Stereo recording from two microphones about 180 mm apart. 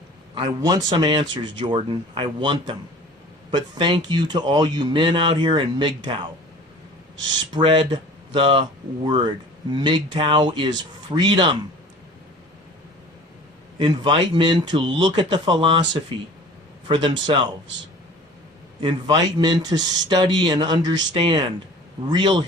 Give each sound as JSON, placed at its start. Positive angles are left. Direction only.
{"t": 0.3, "sound": "speech", "side_deg": -25}
{"t": 7.5, "sound": "speech", "side_deg": -30}
{"t": 13.7, "sound": "speech", "side_deg": -25}
{"t": 18.8, "sound": "speech", "side_deg": -25}